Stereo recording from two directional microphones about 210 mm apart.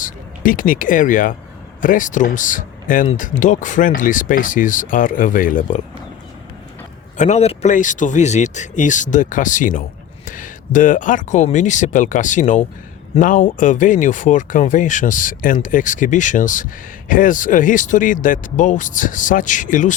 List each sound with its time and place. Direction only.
0.0 s speech: 40° left (ahead or behind)
7.2 s speech: 30° left (ahead or behind)